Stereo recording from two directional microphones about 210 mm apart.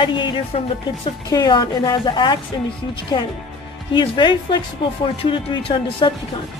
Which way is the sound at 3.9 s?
20° left (ahead or behind).